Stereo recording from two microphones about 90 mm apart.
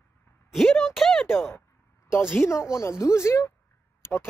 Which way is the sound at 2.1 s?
30° left (ahead or behind).